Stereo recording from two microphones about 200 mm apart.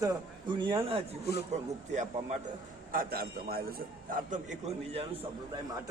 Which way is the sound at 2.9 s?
45° right (ahead or behind).